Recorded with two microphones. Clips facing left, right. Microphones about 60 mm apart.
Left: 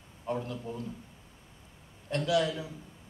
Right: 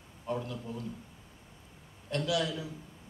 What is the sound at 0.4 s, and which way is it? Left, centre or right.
Speech, centre.